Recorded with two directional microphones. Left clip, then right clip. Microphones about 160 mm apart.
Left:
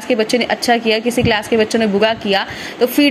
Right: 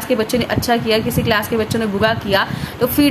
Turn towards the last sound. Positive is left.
turn(degrees=20)  # may be behind; listen again after turning